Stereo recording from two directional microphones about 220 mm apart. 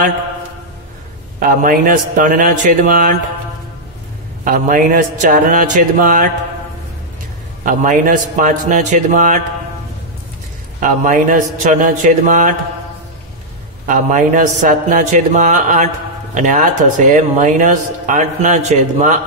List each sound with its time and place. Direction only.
1.5 s speech: 40° right (ahead or behind)
4.5 s speech: 40° right (ahead or behind)
7.6 s speech: 35° right (ahead or behind)
10.8 s speech: 35° right (ahead or behind)
13.8 s speech: 35° right (ahead or behind)